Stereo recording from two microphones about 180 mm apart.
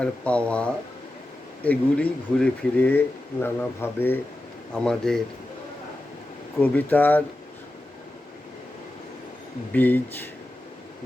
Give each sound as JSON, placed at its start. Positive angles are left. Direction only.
{"t": 0.0, "sound": "speech", "side_deg": 5}
{"t": 6.6, "sound": "speech", "side_deg": 10}
{"t": 9.7, "sound": "speech", "side_deg": 10}